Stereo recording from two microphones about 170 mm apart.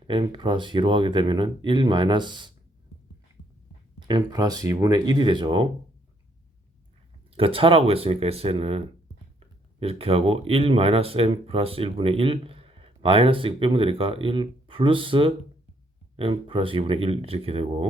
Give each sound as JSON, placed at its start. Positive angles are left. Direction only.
{"t": 0.1, "sound": "speech", "side_deg": -30}
{"t": 4.1, "sound": "speech", "side_deg": -25}
{"t": 7.3, "sound": "speech", "side_deg": -35}
{"t": 9.8, "sound": "speech", "side_deg": -35}